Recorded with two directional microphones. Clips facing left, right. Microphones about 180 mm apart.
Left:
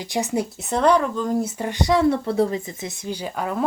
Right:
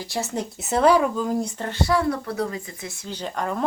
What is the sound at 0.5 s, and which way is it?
Speech, 5° right (ahead or behind).